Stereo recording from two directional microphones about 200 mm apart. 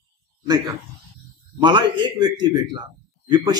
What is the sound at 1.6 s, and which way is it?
A man's voice, 25° right (ahead or behind).